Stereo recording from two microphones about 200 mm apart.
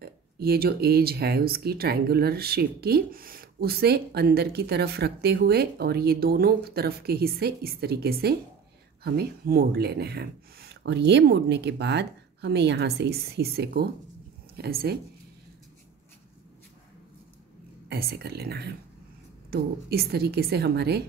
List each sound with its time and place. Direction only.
0.0 s speech: 50° right (ahead or behind)
17.8 s speech: 50° right (ahead or behind)